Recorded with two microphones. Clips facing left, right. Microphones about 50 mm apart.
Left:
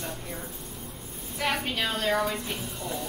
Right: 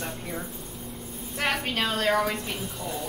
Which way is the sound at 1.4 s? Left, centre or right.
Right.